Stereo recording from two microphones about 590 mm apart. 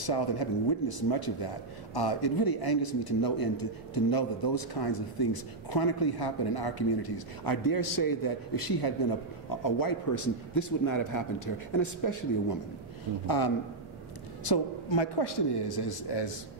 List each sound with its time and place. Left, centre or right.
0.0 s a man's voice: left
14.5 s a man's voice: left